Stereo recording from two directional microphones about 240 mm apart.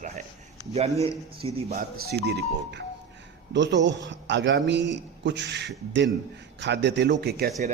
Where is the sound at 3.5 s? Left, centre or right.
Right.